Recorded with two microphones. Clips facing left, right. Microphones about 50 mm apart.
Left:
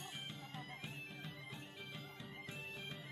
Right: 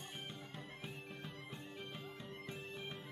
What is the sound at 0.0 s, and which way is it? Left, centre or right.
Music, centre.